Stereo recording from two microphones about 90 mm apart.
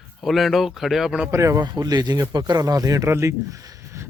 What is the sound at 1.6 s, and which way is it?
Speech, 45° right (ahead or behind).